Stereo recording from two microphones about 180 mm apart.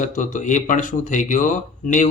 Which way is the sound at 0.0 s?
45° left (ahead or behind).